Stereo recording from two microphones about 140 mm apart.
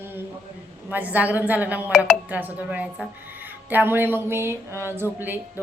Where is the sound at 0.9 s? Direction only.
10° right (ahead or behind).